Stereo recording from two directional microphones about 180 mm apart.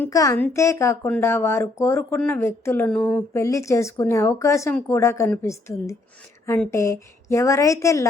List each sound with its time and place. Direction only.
0.0 s a woman's voice: 20° left (ahead or behind)